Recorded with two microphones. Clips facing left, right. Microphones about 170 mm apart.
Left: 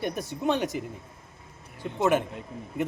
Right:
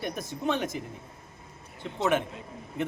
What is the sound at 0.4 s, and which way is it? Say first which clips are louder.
Speech: left 3 dB; 15° left (ahead or behind).